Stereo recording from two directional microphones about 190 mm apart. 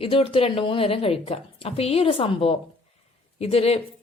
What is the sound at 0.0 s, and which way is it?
A woman's voice, 30° left (ahead or behind).